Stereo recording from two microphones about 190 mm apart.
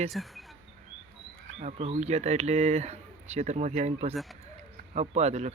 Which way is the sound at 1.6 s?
35° right (ahead or behind).